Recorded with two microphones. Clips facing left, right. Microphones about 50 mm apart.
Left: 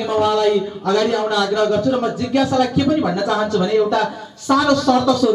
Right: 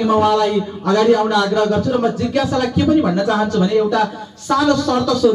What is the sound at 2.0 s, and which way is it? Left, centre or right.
Music, centre.